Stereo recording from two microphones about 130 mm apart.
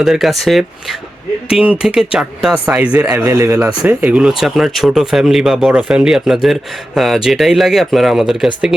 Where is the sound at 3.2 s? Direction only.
20° right (ahead or behind).